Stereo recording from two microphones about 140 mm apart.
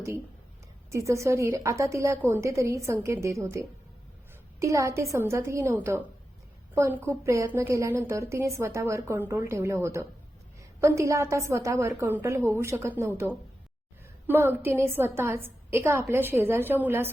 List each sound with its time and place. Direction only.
0.9 s a woman's voice: 20° right (ahead or behind)
4.6 s a woman's voice: 20° right (ahead or behind)